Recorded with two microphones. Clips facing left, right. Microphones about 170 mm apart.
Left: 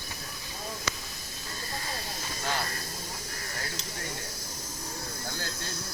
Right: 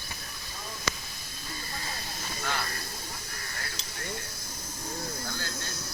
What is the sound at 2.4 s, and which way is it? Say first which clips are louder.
Vehicle: left 2 dB; 40° left (ahead or behind).